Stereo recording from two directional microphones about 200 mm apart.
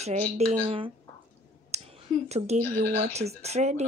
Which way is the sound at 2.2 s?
35° right (ahead or behind).